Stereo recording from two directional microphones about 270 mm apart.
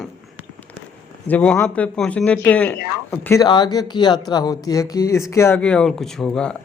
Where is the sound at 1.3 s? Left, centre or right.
Centre.